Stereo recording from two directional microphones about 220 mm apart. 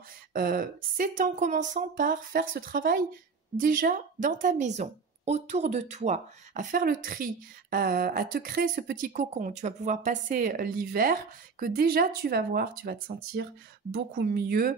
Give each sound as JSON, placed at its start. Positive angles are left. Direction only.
{"t": 0.3, "sound": "a woman's voice", "side_deg": -40}